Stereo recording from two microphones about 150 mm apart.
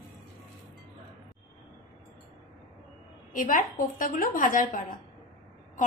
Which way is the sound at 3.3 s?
65° left (ahead or behind).